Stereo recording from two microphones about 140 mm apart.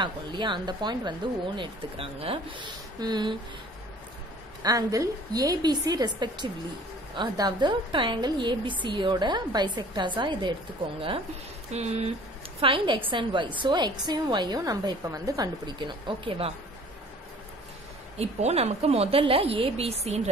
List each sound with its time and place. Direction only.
0.0 s speech: 35° right (ahead or behind)
4.6 s a woman's voice: 25° right (ahead or behind)
11.7 s a woman's voice: 50° right (ahead or behind)
12.5 s speech: 40° right (ahead or behind)
18.1 s a woman's voice: 50° right (ahead or behind)